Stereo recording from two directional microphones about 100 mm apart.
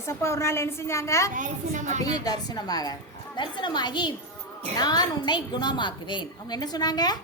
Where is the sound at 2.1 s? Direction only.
40° left (ahead or behind).